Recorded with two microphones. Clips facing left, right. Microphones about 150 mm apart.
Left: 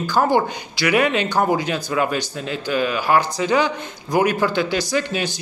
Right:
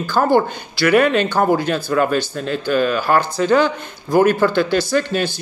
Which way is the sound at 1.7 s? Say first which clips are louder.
Right 4 dB; 50° right (ahead or behind).